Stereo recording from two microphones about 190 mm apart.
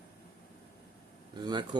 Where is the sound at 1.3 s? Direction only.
20° right (ahead or behind).